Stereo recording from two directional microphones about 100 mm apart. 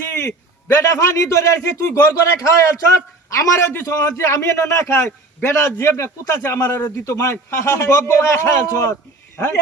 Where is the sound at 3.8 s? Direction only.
30° left (ahead or behind).